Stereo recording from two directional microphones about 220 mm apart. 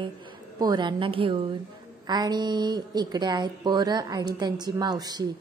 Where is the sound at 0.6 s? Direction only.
20° right (ahead or behind).